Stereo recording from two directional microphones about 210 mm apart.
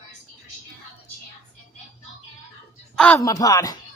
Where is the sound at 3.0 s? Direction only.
10° left (ahead or behind).